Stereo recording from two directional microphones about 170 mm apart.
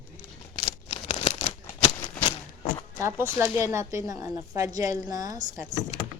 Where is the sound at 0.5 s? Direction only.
35° left (ahead or behind).